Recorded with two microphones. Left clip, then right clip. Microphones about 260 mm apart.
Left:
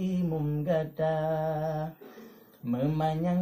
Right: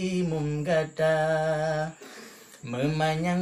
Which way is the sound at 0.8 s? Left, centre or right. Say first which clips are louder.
Right 5 dB; right.